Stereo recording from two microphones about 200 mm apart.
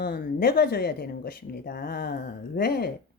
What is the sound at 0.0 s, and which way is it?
Speech, 45° left (ahead or behind).